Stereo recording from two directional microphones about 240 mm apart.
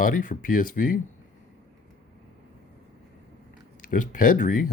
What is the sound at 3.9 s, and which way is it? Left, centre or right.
Speech, left.